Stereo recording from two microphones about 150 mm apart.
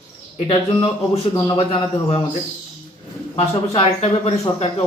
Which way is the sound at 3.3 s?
40° left (ahead or behind).